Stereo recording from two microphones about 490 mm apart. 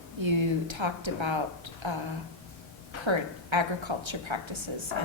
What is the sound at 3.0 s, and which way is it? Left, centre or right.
A woman's voice, right.